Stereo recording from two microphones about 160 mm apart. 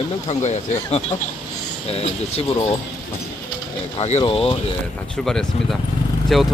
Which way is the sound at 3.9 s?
40° left (ahead or behind).